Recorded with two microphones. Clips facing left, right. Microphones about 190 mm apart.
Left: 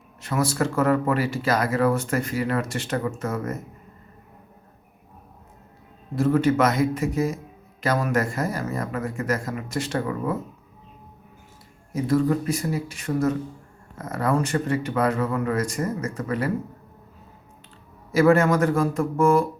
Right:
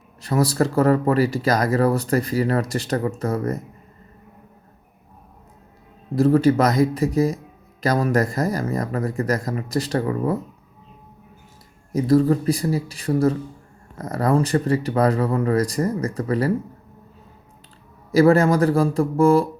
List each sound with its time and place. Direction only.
0.2 s speech: 35° right (ahead or behind)
6.1 s speech: 35° right (ahead or behind)
11.9 s speech: 35° right (ahead or behind)
18.1 s speech: 35° right (ahead or behind)